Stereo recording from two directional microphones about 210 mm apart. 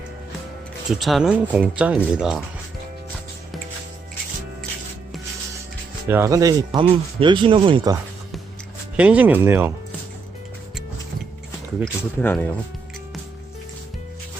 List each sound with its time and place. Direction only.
0.9 s speech: centre (ahead or behind)
6.1 s speech: 10° right (ahead or behind)
9.0 s speech: 5° right (ahead or behind)
12.2 s speech: 10° left (ahead or behind)